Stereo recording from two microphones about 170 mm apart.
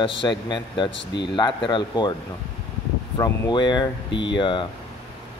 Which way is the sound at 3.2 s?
25° left (ahead or behind).